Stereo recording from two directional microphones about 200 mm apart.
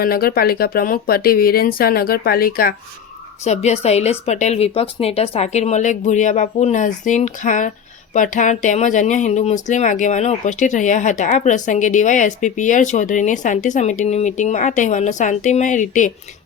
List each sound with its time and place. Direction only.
0.0 s speech: 50° left (ahead or behind)
3.4 s speech: 35° left (ahead or behind)